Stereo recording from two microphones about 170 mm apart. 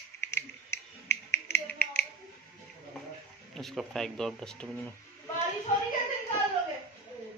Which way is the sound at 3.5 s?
Centre (ahead or behind).